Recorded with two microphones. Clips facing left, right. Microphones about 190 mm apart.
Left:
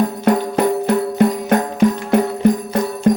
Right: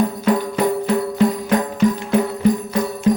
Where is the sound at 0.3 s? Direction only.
55° left (ahead or behind).